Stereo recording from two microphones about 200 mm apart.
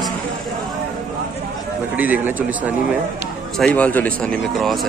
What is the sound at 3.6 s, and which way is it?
Speech, 5° left (ahead or behind).